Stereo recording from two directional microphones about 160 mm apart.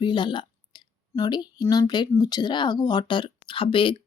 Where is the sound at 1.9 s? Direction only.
25° left (ahead or behind).